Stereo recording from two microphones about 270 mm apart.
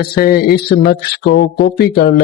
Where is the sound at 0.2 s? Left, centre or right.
Left.